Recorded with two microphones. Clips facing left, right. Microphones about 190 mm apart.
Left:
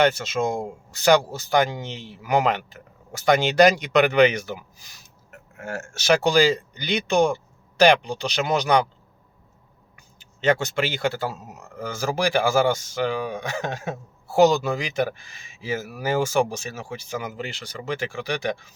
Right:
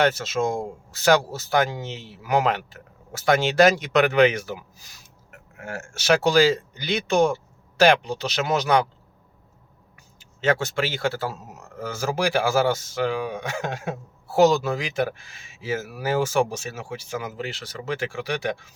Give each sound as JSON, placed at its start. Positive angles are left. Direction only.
{"t": 0.0, "sound": "speech", "side_deg": 0}
{"t": 5.3, "sound": "a sound", "side_deg": 40}
{"t": 5.9, "sound": "speech", "side_deg": -5}
{"t": 10.2, "sound": "speech", "side_deg": 0}